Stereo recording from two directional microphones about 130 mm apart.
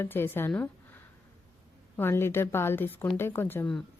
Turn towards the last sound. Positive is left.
turn(degrees=15)  # may be behind; listen again after turning